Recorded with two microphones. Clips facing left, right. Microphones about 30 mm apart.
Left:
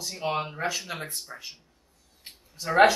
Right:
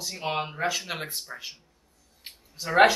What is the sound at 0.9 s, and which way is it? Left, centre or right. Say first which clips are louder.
Speech: right 2 dB; right.